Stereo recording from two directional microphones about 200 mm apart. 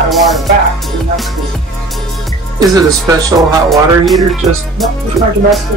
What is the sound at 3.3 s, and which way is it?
Music, centre (ahead or behind).